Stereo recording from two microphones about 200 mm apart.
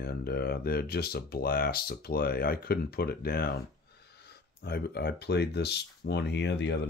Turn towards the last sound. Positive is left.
turn(degrees=60)  # may be behind; listen again after turning